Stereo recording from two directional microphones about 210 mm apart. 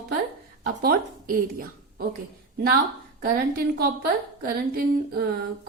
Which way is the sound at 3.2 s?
45° right (ahead or behind).